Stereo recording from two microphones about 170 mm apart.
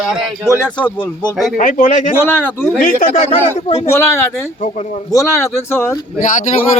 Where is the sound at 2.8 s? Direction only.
50° left (ahead or behind).